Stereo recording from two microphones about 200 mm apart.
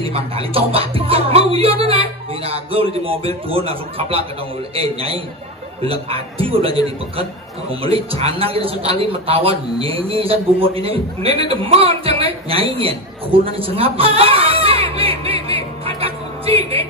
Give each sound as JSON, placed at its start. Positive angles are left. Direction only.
{"t": 0.1, "sound": "a man's voice", "side_deg": -30}
{"t": 7.8, "sound": "a man's voice", "side_deg": -30}
{"t": 13.6, "sound": "a sound", "side_deg": -25}